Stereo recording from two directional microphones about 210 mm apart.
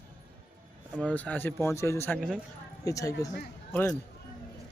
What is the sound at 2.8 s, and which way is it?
Speech, 15° left (ahead or behind).